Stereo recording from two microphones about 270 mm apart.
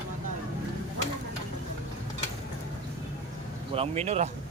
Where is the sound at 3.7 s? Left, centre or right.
Right.